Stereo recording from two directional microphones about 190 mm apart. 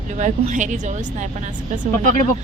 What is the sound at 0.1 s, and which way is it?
A woman's voice, 40° right (ahead or behind).